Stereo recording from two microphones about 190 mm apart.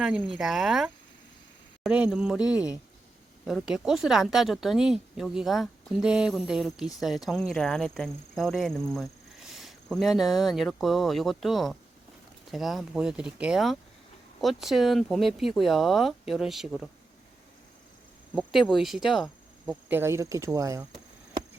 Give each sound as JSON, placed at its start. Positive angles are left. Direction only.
{"t": 0.0, "sound": "a woman's voice", "side_deg": 0}
{"t": 18.3, "sound": "speech", "side_deg": 0}
{"t": 19.9, "sound": "speech", "side_deg": -10}